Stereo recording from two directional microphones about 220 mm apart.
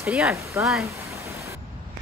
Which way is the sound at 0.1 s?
5° right (ahead or behind).